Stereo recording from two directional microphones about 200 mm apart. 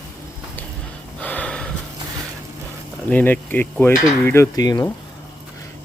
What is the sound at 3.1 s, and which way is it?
Speech, 10° left (ahead or behind).